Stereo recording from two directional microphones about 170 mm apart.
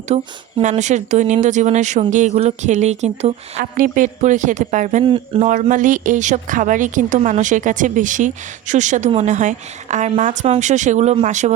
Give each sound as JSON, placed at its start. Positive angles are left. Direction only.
{"t": 0.1, "sound": "a woman's voice", "side_deg": -45}
{"t": 3.6, "sound": "a woman's voice", "side_deg": -50}
{"t": 5.0, "sound": "speech", "side_deg": -30}
{"t": 5.5, "sound": "a woman's voice", "side_deg": -50}